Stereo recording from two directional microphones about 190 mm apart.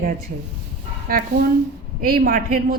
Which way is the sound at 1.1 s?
50° right (ahead or behind).